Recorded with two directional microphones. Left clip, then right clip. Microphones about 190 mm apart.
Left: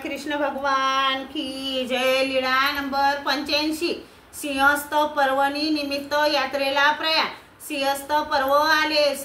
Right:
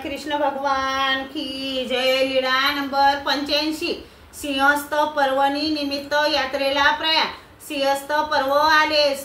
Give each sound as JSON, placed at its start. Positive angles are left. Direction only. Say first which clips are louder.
{"t": 0.3, "sound": "female singing", "louder": "right 2 dB", "side_deg": 10}